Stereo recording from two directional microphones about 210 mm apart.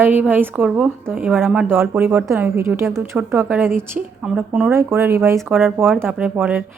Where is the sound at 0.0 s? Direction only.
10° right (ahead or behind).